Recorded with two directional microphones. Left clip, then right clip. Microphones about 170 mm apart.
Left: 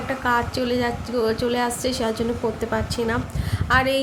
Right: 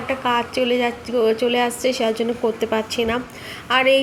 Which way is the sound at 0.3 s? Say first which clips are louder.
Right 2 dB; 5° right (ahead or behind).